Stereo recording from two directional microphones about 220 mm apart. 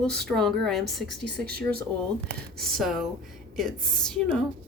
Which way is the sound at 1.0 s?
50° right (ahead or behind).